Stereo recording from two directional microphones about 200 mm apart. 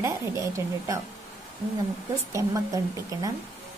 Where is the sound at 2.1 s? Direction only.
15° right (ahead or behind).